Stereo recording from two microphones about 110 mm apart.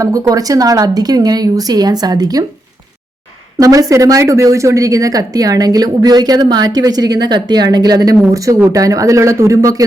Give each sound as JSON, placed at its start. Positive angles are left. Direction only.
{"t": 0.0, "sound": "speech", "side_deg": -30}
{"t": 3.6, "sound": "speech", "side_deg": -30}